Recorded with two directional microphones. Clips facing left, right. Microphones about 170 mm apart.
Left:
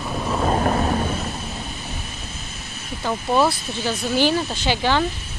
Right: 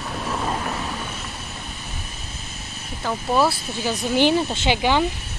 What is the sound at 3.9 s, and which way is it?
Speech, 20° right (ahead or behind).